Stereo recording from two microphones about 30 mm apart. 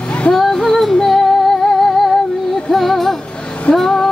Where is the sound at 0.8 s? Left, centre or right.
Centre.